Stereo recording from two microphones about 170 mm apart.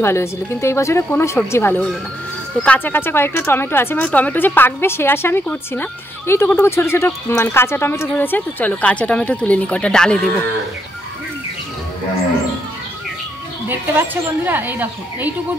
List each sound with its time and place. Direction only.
0.0 s speech: 15° left (ahead or behind)
13.7 s a woman's voice: 10° right (ahead or behind)